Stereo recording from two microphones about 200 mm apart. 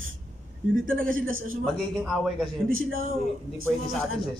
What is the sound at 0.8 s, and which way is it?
Speech, 45° right (ahead or behind).